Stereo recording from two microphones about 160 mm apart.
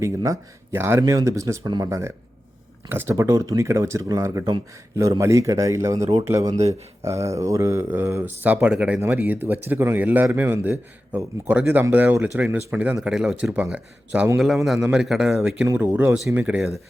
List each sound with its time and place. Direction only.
0.0 s a man's voice: 20° right (ahead or behind); by 15.6 s 5° right (ahead or behind)
15.6 s a man's voice: 15° right (ahead or behind)